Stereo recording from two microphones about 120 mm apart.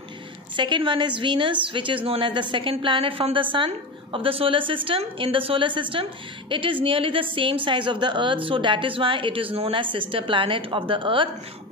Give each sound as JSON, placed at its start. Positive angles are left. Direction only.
{"t": 0.6, "sound": "a woman's voice", "side_deg": -40}